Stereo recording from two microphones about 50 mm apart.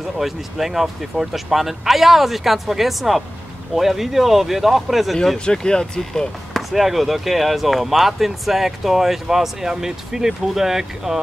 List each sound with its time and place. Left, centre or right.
0.2 s speech: centre
5.4 s speech: centre
6.7 s speech: centre